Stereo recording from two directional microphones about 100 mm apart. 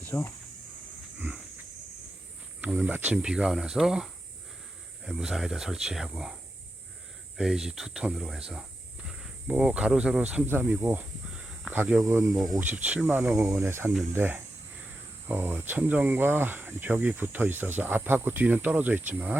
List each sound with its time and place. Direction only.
0.1 s speech: 25° left (ahead or behind)
2.6 s speech: 15° right (ahead or behind)
7.3 s speech: 5° right (ahead or behind)
10.4 s speech: 20° right (ahead or behind)
11.3 s snake: 5° right (ahead or behind)
11.9 s speech: 25° right (ahead or behind)
12.5 s speech: 15° right (ahead or behind)